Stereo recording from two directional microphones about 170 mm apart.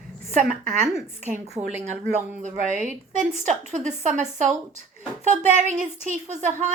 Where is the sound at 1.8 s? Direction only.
45° right (ahead or behind).